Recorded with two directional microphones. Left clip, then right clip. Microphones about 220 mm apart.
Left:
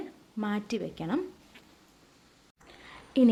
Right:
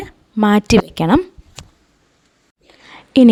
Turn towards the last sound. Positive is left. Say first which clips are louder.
# right 14 dB
turn(degrees=-40)  # may be behind; listen again after turning